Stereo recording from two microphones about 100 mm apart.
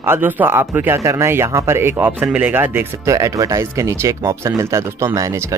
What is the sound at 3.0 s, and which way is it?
Speech, 35° right (ahead or behind).